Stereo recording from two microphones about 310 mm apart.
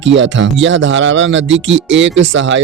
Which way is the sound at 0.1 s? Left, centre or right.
Right.